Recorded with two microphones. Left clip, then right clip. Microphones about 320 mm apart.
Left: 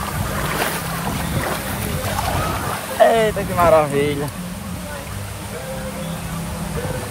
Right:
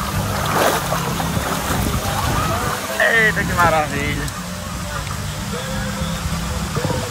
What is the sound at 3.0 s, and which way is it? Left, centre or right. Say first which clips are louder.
Speech: left 1 dB; centre.